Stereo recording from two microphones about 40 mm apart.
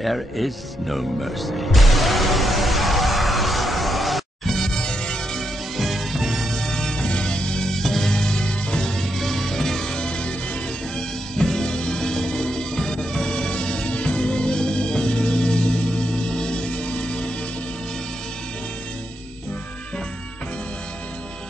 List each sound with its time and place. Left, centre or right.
0.0 s music: centre
5.8 s music: centre
6.6 s music: centre
9.0 s music: centre
9.9 s music: left
11.0 s music: centre